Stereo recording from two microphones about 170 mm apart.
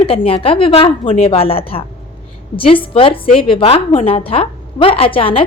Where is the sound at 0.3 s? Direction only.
35° left (ahead or behind).